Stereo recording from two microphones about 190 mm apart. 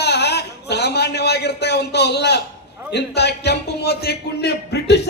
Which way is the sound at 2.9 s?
60° left (ahead or behind).